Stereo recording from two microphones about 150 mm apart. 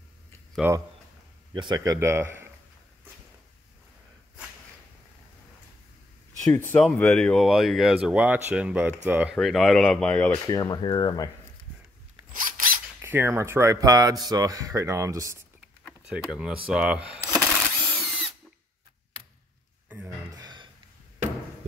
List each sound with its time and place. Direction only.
0.6 s speech: 10° right (ahead or behind)
1.5 s speech: 30° right (ahead or behind)
2.0 s speech: 20° right (ahead or behind)
6.4 s speech: 15° left (ahead or behind)
10.4 s speech: 25° left (ahead or behind)
13.0 s speech: 15° right (ahead or behind)
16.1 s speech: 5° right (ahead or behind)
17.3 s sewing machine: 10° left (ahead or behind)
20.3 s a sound: 30° right (ahead or behind)